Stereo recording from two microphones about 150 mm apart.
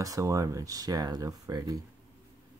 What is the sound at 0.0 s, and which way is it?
Speech, 20° right (ahead or behind).